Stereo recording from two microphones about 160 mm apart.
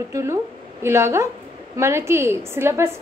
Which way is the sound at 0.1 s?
15° right (ahead or behind).